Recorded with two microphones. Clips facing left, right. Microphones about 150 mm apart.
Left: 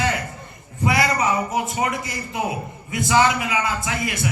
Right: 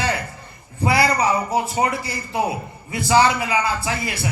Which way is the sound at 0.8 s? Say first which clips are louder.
Right 2 dB; 30° right (ahead or behind).